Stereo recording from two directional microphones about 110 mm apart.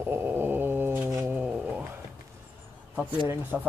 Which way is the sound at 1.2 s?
15° right (ahead or behind).